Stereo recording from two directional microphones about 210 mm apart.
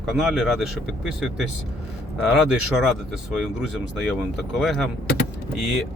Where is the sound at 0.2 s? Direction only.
Centre (ahead or behind).